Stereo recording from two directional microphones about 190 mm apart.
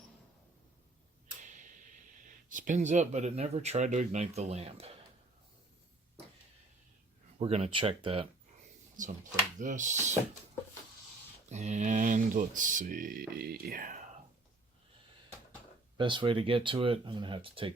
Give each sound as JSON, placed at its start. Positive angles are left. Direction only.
{"t": 1.4, "sound": "a sound", "side_deg": -40}
{"t": 2.5, "sound": "speech", "side_deg": -45}
{"t": 7.3, "sound": "speech", "side_deg": -30}
{"t": 9.0, "sound": "speech", "side_deg": -40}
{"t": 11.4, "sound": "speech", "side_deg": -35}
{"t": 16.0, "sound": "speech", "side_deg": -25}